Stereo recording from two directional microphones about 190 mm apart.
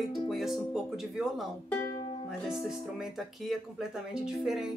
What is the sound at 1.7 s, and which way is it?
Music, 15° left (ahead or behind).